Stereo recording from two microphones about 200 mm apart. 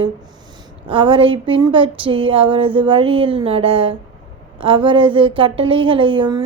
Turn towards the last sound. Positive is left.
turn(degrees=-25)  # may be behind; listen again after turning